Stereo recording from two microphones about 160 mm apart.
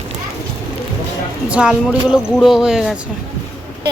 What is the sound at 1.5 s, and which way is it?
Speech, 5° right (ahead or behind).